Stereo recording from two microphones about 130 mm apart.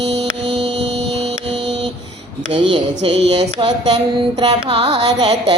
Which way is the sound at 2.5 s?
40° right (ahead or behind).